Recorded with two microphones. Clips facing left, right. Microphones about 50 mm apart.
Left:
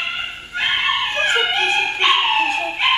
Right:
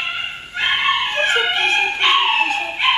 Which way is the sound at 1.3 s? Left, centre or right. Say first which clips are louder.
Even; centre.